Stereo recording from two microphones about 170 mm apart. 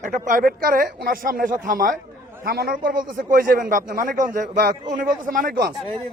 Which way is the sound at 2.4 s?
65° right (ahead or behind).